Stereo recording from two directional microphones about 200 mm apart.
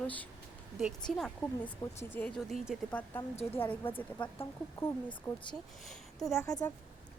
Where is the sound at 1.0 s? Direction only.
5° left (ahead or behind).